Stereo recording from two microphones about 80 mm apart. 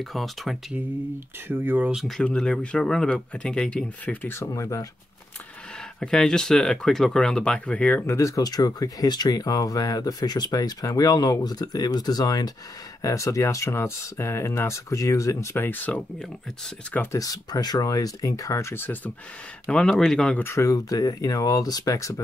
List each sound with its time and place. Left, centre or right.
0.0 s speech: centre
1.5 s speech: right
2.2 s speech: centre
4.3 s speech: left
5.9 s speech: centre
8.1 s speech: left
13.0 s speech: left
15.5 s speech: left
17.2 s speech: left
19.7 s speech: centre
20.5 s speech: left